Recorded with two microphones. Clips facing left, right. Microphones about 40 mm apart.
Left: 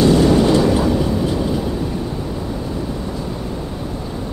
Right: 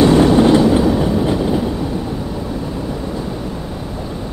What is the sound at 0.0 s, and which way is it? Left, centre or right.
Vehicle, right.